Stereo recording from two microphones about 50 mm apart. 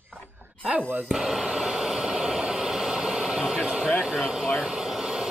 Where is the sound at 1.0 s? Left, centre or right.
Centre.